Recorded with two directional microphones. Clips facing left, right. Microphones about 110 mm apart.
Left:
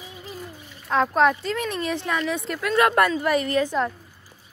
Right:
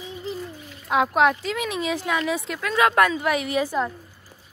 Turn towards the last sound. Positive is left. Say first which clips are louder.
# left 1 dB
turn(degrees=-10)  # may be behind; listen again after turning